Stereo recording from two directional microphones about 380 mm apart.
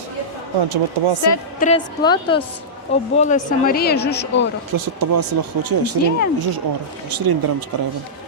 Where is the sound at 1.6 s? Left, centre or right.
Centre.